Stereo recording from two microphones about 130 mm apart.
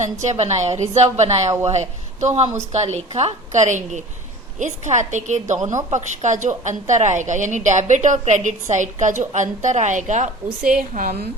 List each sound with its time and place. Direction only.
0.0 s a woman's voice: 65° right (ahead or behind)
10.7 s a woman's voice: 90° right